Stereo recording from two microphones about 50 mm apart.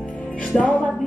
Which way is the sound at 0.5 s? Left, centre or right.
Left.